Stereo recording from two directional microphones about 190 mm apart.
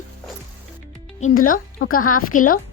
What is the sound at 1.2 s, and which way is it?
A woman's voice, 45° left (ahead or behind).